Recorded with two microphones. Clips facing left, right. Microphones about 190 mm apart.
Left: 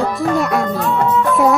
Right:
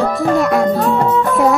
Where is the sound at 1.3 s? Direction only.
Centre (ahead or behind).